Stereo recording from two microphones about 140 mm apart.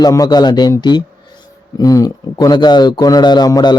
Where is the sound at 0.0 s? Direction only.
25° left (ahead or behind).